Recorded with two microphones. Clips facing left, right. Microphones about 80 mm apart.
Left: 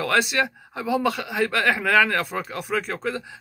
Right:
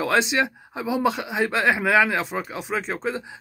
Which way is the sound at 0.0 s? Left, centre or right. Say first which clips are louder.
Right 1 dB; right.